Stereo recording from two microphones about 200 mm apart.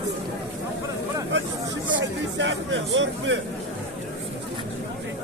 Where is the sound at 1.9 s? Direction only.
65° right (ahead or behind).